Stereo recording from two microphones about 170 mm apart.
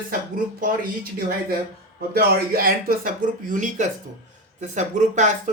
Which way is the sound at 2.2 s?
60° right (ahead or behind).